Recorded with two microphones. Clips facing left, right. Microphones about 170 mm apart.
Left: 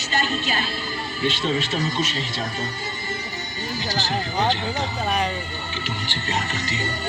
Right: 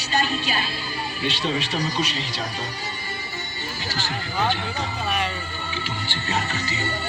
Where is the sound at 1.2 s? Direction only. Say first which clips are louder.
Left 3 dB; 45° left (ahead or behind).